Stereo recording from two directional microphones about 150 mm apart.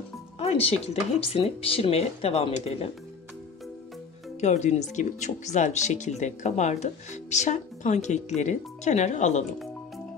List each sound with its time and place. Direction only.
0.4 s speech: 40° left (ahead or behind)
4.4 s speech: 50° left (ahead or behind)